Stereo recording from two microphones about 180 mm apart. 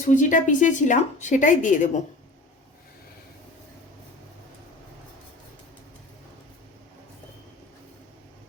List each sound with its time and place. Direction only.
0.1 s a woman's voice: 45° left (ahead or behind)